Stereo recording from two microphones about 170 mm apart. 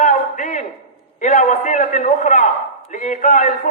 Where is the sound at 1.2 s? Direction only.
50° left (ahead or behind).